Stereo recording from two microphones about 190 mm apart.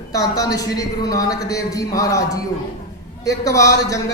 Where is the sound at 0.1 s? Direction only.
20° left (ahead or behind).